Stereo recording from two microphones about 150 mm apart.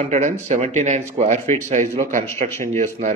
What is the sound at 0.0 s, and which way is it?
A man's voice, 55° right (ahead or behind).